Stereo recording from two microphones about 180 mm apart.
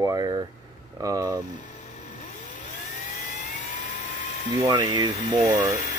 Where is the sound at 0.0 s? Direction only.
15° right (ahead or behind).